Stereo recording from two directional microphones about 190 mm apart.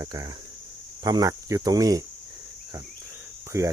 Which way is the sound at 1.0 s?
20° right (ahead or behind).